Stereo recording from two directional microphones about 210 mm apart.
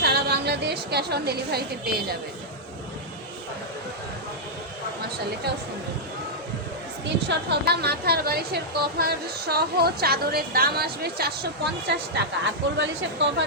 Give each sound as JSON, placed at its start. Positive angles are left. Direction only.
{"t": 0.0, "sound": "a woman's voice", "side_deg": -50}
{"t": 7.0, "sound": "a woman's voice", "side_deg": -55}